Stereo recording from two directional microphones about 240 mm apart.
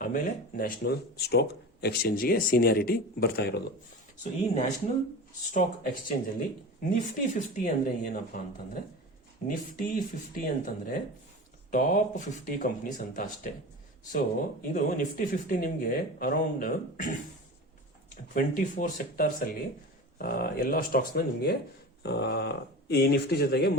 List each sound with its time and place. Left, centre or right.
0.0 s speech: left
4.2 s speech: left
7.2 s speech: left
18.3 s speech: left